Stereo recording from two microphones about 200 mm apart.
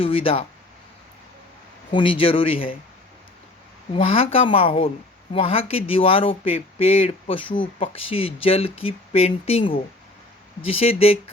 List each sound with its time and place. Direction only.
0.0 s speech: 25° left (ahead or behind)
1.9 s speech: 25° left (ahead or behind)
3.9 s speech: 30° left (ahead or behind)